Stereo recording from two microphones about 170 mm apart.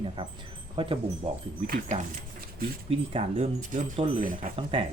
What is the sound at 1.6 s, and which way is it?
Speech, 50° right (ahead or behind).